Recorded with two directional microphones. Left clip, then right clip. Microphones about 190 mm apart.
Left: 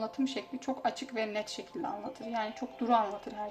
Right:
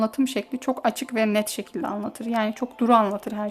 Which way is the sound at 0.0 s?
60° right (ahead or behind).